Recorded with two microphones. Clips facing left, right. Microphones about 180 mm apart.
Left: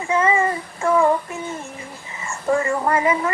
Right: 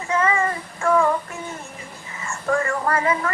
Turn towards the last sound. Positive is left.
turn(degrees=20)  # may be behind; listen again after turning